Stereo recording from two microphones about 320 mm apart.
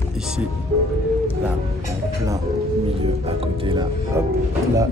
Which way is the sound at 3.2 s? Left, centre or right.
Centre.